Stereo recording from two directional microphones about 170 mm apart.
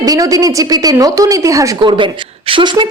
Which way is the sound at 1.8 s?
30° right (ahead or behind).